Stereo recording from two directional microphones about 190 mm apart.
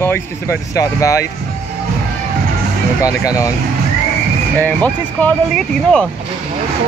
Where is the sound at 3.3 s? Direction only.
20° left (ahead or behind).